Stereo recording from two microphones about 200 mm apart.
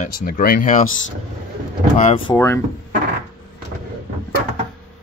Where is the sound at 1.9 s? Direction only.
35° left (ahead or behind).